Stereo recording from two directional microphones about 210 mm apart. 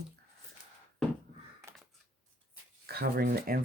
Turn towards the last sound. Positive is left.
turn(degrees=-40)  # may be behind; listen again after turning